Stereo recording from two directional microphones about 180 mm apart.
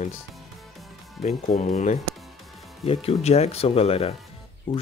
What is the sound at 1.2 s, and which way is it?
Speech, 40° left (ahead or behind).